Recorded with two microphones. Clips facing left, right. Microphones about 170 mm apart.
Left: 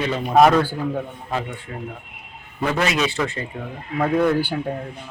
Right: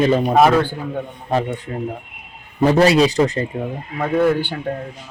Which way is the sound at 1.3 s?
35° right (ahead or behind).